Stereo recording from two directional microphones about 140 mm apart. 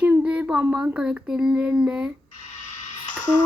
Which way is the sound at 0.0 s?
10° right (ahead or behind).